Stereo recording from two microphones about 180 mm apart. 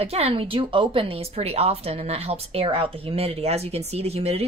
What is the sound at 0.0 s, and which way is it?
A woman's voice, 35° right (ahead or behind).